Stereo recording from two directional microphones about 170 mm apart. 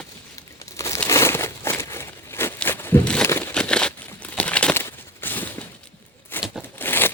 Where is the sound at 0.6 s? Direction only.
15° left (ahead or behind).